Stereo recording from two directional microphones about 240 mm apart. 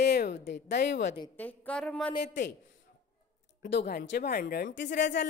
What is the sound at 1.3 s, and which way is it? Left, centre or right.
Speech, centre.